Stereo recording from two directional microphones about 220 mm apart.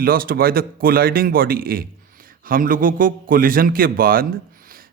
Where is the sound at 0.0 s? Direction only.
40° right (ahead or behind).